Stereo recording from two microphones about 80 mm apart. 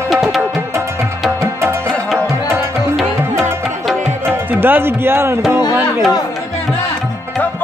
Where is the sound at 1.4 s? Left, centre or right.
Right.